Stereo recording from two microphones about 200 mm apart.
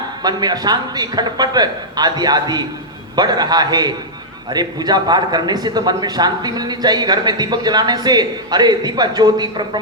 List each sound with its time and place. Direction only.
0.2 s speech: 20° right (ahead or behind)